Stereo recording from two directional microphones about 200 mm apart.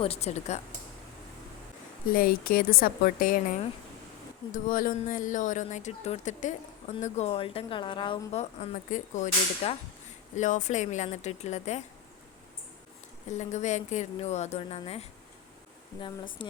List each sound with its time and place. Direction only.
0.0 s speech: 30° left (ahead or behind)
2.1 s a woman's voice: 45° left (ahead or behind)
13.3 s a woman's voice: 35° left (ahead or behind)